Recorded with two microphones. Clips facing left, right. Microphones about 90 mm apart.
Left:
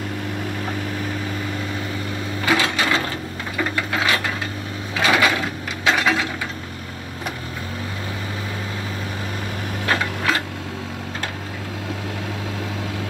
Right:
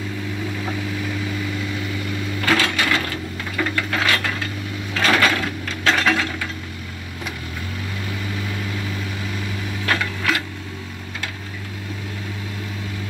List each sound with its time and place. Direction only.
0.9 s vehicle: 40° left (ahead or behind)
2.4 s sewing machine: 15° left (ahead or behind)
4.9 s mechanisms: 10° left (ahead or behind)
9.8 s a sound: 25° left (ahead or behind)